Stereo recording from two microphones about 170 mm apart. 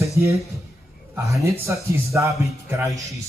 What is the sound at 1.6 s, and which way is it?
Speech, 15° right (ahead or behind).